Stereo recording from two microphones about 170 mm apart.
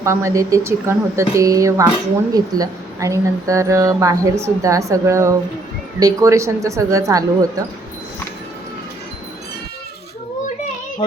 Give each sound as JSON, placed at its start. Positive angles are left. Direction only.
{"t": 0.0, "sound": "speech", "side_deg": -15}